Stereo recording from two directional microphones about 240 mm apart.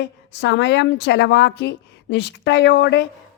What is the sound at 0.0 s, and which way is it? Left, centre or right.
A woman's voice, left.